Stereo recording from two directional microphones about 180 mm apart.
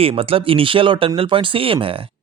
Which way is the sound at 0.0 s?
30° right (ahead or behind).